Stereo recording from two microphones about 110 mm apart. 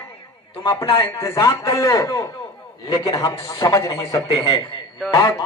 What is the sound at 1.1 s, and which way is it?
A man's voice, 30° left (ahead or behind).